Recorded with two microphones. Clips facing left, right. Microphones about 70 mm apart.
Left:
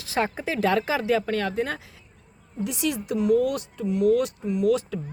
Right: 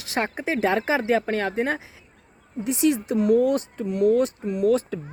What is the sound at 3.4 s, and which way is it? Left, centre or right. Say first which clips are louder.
Speech: right 4 dB; right.